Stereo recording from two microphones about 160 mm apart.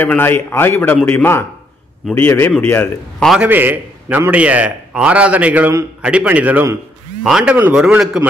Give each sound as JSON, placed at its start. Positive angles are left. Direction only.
{"t": 0.0, "sound": "a man's voice", "side_deg": 15}
{"t": 3.3, "sound": "a man's voice", "side_deg": -10}